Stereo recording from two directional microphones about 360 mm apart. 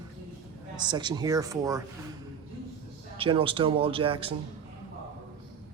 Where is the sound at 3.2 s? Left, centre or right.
Centre.